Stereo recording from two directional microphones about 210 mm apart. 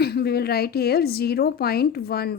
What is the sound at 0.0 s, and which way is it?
A woman's voice, 50° left (ahead or behind).